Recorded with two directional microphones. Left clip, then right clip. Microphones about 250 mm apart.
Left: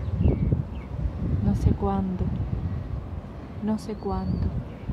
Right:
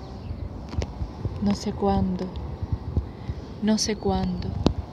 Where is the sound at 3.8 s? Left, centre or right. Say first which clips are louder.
Right 5 dB; centre.